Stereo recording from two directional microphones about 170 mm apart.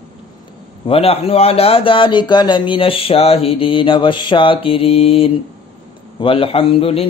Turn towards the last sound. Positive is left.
turn(degrees=35)  # may be behind; listen again after turning